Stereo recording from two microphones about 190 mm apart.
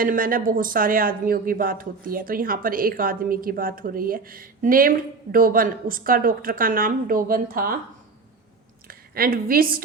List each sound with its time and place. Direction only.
0.0 s speech: 45° right (ahead or behind)
8.9 s a woman's voice: 50° right (ahead or behind)